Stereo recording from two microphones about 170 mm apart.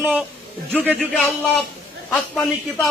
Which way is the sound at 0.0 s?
10° right (ahead or behind).